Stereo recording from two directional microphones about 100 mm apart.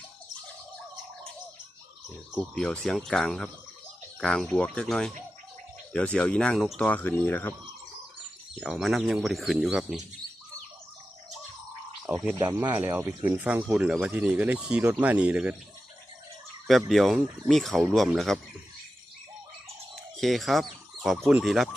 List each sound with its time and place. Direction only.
2.3 s speech: centre (ahead or behind); by 7.5 s 20° left (ahead or behind)
8.6 s speech: centre (ahead or behind)
12.1 s speech: 15° right (ahead or behind)
16.6 s speech: centre (ahead or behind)
20.1 s speech: centre (ahead or behind)